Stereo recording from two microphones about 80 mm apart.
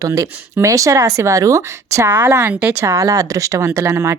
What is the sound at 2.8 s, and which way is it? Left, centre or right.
Speech, right.